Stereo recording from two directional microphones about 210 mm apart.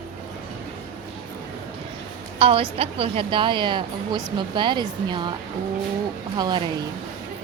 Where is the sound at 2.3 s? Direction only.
25° right (ahead or behind).